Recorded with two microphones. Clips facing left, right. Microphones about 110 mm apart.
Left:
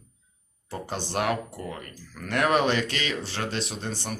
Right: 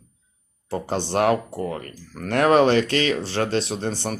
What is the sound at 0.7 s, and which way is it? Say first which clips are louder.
Speech: right 7 dB; 35° right (ahead or behind).